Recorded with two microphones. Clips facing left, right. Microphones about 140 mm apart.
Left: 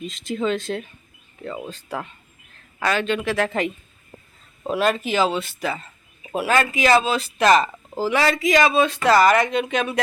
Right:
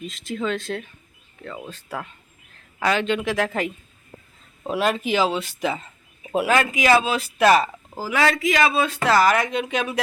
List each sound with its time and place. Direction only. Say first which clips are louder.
0.0 s speech: left 3 dB; centre (ahead or behind)
1.5 s speech: left 4 dB; 10° left (ahead or behind)
1.7 s speech: left 2 dB; centre (ahead or behind)
2.7 s a man's voice: right 1 dB; 15° right (ahead or behind)
4.7 s speech: left 1 dB; 15° right (ahead or behind)